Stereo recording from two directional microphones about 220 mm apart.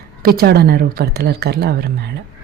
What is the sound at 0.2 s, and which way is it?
Speech, 45° right (ahead or behind).